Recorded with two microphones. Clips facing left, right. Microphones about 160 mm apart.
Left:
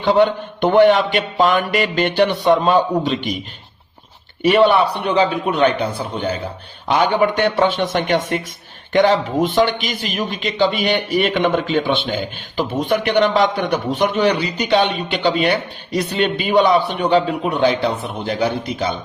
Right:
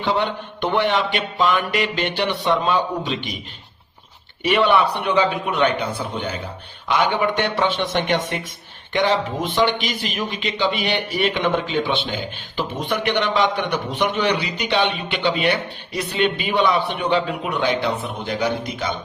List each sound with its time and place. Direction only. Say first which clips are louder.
0.0 s mantra: left 7 dB; 45° left (ahead or behind)
4.4 s a man's voice: left 4 dB; 40° left (ahead or behind)
6.8 s mantra: left 4 dB; 40° left (ahead or behind)
8.9 s a man's voice: left 5 dB; 50° left (ahead or behind); by 18.9 s 30° left (ahead or behind)